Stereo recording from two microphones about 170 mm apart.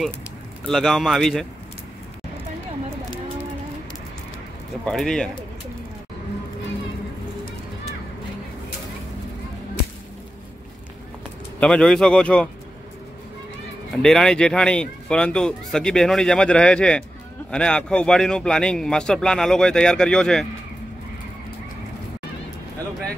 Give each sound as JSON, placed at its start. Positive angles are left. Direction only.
{"t": 0.7, "sound": "speech", "side_deg": 0}
{"t": 4.8, "sound": "speech", "side_deg": 5}
{"t": 11.6, "sound": "speech", "side_deg": 5}
{"t": 14.0, "sound": "speech", "side_deg": 5}